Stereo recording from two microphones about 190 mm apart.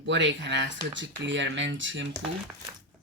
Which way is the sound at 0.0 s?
70° right (ahead or behind).